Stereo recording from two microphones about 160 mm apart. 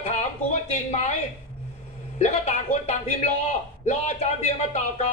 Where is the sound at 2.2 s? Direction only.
45° left (ahead or behind).